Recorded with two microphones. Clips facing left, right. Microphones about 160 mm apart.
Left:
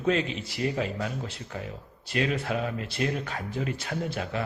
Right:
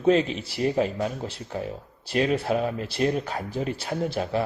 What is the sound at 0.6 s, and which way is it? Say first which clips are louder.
Speech: right 5 dB; 40° right (ahead or behind).